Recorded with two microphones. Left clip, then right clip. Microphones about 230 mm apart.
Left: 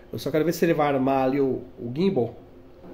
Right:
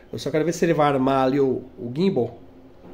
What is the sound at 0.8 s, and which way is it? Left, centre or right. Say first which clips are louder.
Speech: right 3 dB; right.